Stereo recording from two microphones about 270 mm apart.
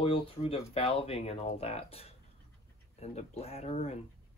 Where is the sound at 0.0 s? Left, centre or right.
Left.